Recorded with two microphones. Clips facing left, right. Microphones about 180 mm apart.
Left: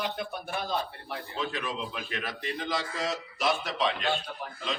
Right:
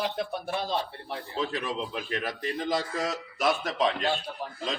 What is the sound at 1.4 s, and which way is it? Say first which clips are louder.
A man's voice: right 3 dB; 40° right (ahead or behind).